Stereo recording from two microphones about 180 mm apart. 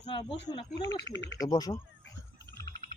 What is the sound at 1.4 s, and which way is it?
Speech, 20° left (ahead or behind).